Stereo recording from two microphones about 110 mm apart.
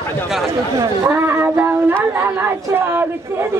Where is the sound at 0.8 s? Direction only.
25° right (ahead or behind).